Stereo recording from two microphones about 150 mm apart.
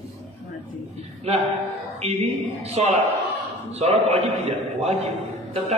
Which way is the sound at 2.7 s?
45° right (ahead or behind).